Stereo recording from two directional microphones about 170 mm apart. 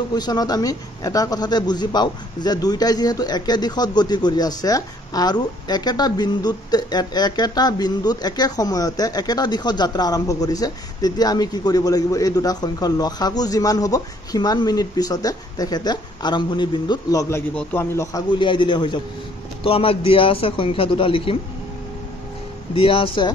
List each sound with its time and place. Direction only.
0.1 s a man's voice: 25° left (ahead or behind)
22.8 s a man's voice: 30° left (ahead or behind)